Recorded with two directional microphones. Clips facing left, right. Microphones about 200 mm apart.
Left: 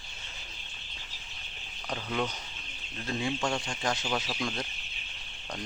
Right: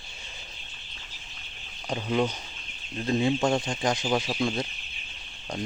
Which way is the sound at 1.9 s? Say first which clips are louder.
Right 6 dB; 20° right (ahead or behind).